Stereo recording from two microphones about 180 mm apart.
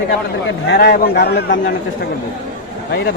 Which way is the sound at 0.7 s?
65° left (ahead or behind).